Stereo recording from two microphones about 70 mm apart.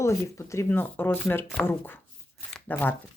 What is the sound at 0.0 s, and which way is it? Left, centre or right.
Speech, left.